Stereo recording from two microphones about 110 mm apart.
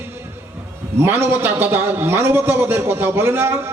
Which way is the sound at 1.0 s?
20° right (ahead or behind).